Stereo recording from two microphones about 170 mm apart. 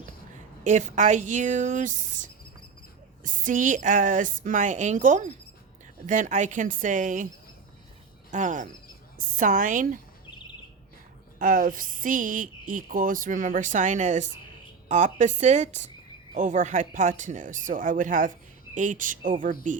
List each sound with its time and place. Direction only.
0.6 s a woman's voice: 45° right (ahead or behind)
8.3 s a woman's voice: 45° right (ahead or behind)
11.3 s a woman's voice: 55° right (ahead or behind)